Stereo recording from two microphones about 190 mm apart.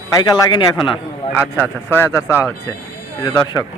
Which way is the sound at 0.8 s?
5° right (ahead or behind).